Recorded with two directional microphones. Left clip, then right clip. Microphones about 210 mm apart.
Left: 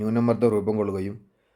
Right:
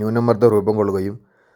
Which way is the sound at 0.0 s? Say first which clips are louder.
Right 7 dB; 25° right (ahead or behind).